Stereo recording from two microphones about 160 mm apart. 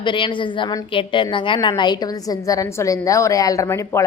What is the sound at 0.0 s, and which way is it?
A woman's voice, 30° left (ahead or behind).